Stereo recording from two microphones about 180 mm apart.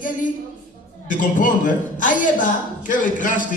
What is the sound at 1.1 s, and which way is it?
A man's voice, 45° left (ahead or behind).